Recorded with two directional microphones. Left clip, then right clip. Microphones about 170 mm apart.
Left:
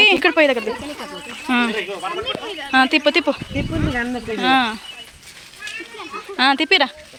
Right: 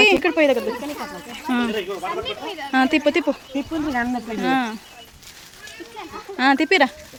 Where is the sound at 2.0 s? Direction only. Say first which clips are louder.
Left 2 dB; 65° right (ahead or behind).